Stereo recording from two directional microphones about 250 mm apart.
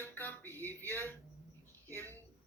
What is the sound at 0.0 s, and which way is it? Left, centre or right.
Speech, centre.